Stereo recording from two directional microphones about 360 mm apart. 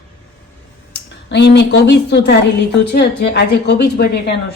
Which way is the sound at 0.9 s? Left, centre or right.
Left.